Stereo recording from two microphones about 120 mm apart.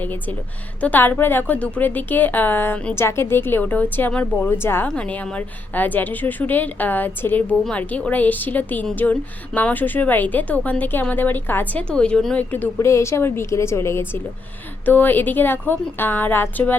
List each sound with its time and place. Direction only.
0.0 s speech: 15° left (ahead or behind)